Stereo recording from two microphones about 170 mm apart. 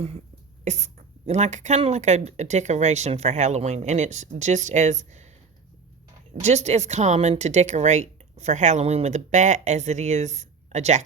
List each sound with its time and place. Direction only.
0.6 s speech: 40° right (ahead or behind)
6.4 s speech: 40° right (ahead or behind)